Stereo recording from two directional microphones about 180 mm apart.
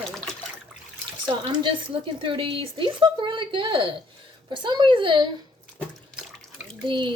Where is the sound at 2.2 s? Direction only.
30° right (ahead or behind).